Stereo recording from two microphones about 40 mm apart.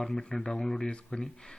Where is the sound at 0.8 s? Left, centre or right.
Left.